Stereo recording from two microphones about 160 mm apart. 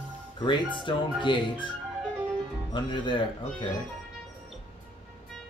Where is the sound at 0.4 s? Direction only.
30° left (ahead or behind).